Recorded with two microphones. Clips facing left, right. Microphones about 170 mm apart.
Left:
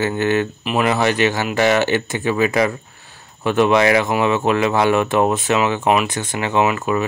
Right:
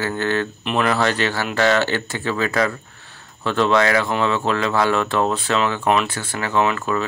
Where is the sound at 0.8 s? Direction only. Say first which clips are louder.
Left 4 dB; 15° left (ahead or behind).